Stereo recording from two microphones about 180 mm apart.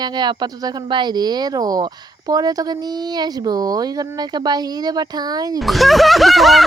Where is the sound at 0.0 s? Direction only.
25° right (ahead or behind).